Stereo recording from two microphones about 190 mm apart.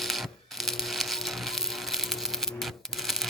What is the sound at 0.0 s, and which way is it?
Crushing, centre (ahead or behind).